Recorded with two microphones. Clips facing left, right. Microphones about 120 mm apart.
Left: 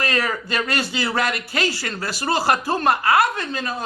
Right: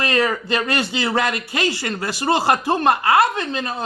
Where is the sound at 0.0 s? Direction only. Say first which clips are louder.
Right 3 dB; 25° right (ahead or behind).